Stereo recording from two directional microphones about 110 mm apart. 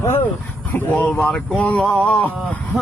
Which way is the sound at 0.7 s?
15° left (ahead or behind).